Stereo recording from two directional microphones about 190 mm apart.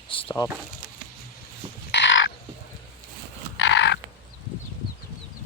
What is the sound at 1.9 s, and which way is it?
Crow, 75° left (ahead or behind).